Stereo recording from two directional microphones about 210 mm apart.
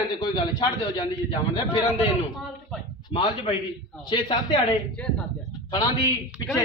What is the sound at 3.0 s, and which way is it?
A man's voice, 20° left (ahead or behind).